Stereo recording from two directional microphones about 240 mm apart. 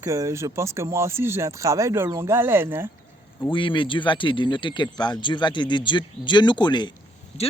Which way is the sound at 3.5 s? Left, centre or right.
Left.